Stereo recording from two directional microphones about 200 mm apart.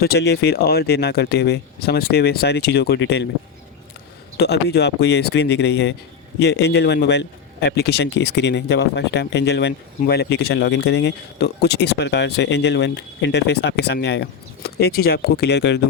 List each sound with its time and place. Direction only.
0.0 s speech: 55° left (ahead or behind)
4.4 s a man's voice: 55° left (ahead or behind)